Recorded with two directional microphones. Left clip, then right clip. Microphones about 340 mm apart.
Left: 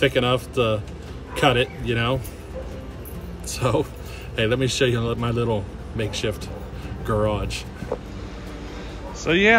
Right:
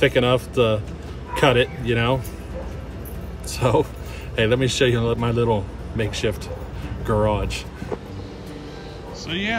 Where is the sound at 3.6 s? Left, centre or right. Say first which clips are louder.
Right 3 dB; centre.